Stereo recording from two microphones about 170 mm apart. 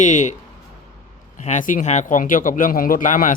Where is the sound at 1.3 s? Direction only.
45° left (ahead or behind).